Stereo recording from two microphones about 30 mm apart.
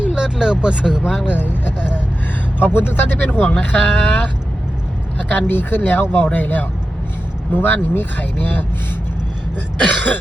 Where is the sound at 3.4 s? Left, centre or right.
Left.